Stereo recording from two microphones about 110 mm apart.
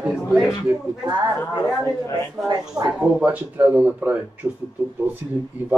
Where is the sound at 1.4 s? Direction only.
20° left (ahead or behind).